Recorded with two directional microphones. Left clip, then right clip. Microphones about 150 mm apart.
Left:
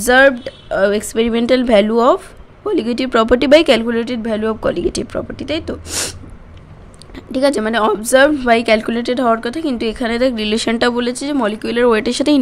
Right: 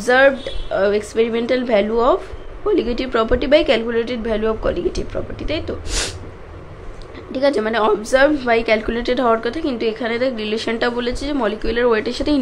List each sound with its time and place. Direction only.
0.0 s speech: 60° left (ahead or behind)
7.3 s speech: 60° left (ahead or behind)